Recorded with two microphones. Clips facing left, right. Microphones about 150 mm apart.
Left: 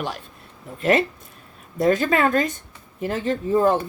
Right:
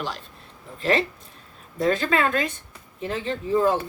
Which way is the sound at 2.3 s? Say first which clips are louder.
Left 4 dB; 45° left (ahead or behind).